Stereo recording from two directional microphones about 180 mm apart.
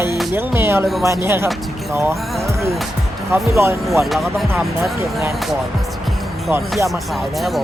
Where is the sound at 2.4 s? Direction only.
15° right (ahead or behind).